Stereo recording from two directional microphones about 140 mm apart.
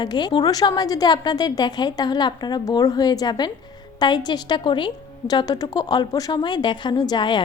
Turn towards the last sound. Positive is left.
turn(degrees=35)  # may be behind; listen again after turning